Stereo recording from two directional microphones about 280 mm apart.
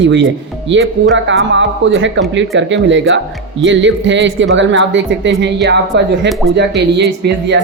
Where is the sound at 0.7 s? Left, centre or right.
Right.